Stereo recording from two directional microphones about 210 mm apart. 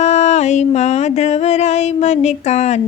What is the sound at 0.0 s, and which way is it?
Music, 30° left (ahead or behind).